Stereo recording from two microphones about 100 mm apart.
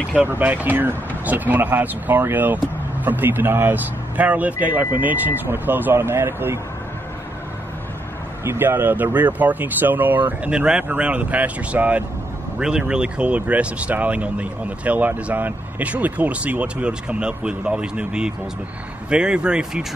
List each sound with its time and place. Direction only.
0.1 s speech: 15° right (ahead or behind)
8.5 s speech: 20° right (ahead or behind); by 19.9 s 5° right (ahead or behind)